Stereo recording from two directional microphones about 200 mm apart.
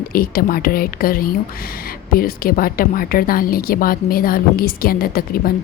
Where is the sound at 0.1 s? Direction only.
45° left (ahead or behind).